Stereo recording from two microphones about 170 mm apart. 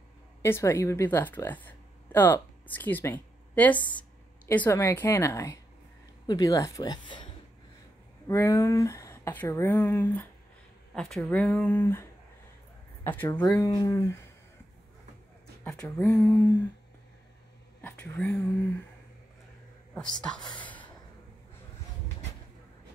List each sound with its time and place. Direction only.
0.4 s a woman's voice: 15° left (ahead or behind)
8.3 s speech: 15° left (ahead or behind)
11.0 s a woman's voice: centre (ahead or behind); by 14.1 s 20° left (ahead or behind)
15.6 s speech: 5° left (ahead or behind)
17.8 s speech: 10° left (ahead or behind)
19.9 s speech: 5° left (ahead or behind)
20.5 s a sound: 10° left (ahead or behind)